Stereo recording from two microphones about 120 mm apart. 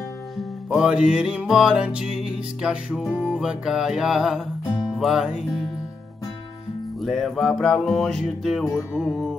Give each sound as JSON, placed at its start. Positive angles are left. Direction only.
{"t": 0.4, "sound": "music", "side_deg": -5}
{"t": 7.0, "sound": "music", "side_deg": 0}